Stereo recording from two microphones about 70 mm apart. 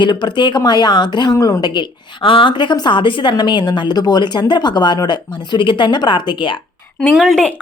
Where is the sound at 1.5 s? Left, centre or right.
Left.